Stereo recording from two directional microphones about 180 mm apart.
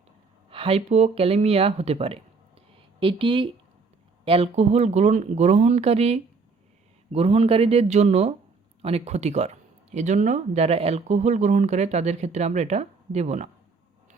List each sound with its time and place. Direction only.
0.5 s speech: 30° right (ahead or behind)